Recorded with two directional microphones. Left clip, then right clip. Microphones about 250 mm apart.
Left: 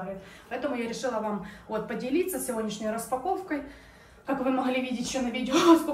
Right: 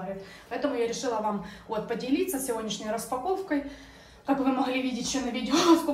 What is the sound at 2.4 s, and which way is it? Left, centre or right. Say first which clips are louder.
Speech: even; right.